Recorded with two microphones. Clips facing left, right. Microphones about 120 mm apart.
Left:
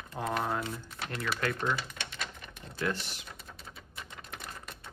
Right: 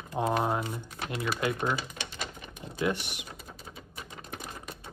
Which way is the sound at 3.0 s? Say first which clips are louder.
Right 2 dB; 65° right (ahead or behind).